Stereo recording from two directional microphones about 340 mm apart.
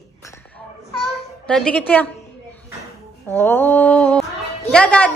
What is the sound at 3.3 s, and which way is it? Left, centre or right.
A woman's voice, centre.